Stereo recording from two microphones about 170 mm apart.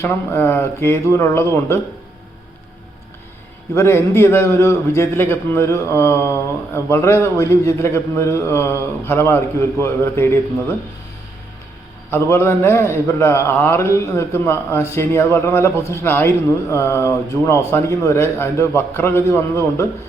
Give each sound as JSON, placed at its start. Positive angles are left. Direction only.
{"t": 0.0, "sound": "a man's voice", "side_deg": 15}
{"t": 3.8, "sound": "a man's voice", "side_deg": 15}
{"t": 12.1, "sound": "a man's voice", "side_deg": 15}